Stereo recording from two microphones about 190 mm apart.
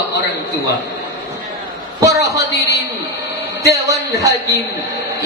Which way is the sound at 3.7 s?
15° right (ahead or behind).